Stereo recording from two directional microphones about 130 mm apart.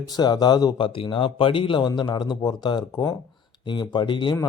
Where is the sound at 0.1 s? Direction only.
30° left (ahead or behind).